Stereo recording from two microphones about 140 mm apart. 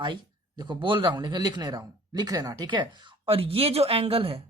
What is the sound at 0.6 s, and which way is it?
A man's voice, 35° right (ahead or behind).